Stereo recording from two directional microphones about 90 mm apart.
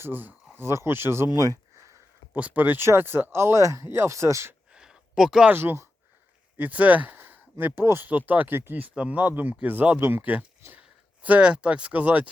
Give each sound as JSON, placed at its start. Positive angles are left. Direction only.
{"t": 0.0, "sound": "speech", "side_deg": -20}
{"t": 1.5, "sound": "a sound", "side_deg": -35}
{"t": 2.3, "sound": "speech", "side_deg": -20}
{"t": 4.7, "sound": "a sound", "side_deg": -5}
{"t": 5.5, "sound": "speech", "side_deg": -25}
{"t": 6.6, "sound": "speech", "side_deg": -15}